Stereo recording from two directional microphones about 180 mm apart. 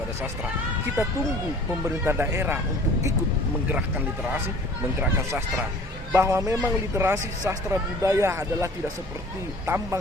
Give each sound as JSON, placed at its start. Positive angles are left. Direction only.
{"t": 1.8, "sound": "speech", "side_deg": -10}
{"t": 6.1, "sound": "speech", "side_deg": -15}